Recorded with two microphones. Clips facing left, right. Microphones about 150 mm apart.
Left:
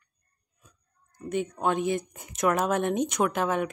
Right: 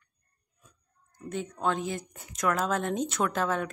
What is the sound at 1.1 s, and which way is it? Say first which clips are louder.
Speech: left 5 dB; 15° left (ahead or behind).